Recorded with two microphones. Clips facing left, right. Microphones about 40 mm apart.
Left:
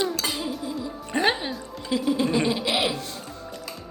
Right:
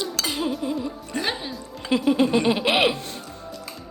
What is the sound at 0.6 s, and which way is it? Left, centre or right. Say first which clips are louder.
Music: right 5 dB; right.